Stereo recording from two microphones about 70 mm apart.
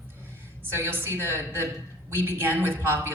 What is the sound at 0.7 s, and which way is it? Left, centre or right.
Speech, right.